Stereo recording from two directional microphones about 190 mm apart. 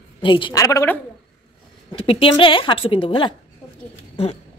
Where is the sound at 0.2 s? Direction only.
25° left (ahead or behind).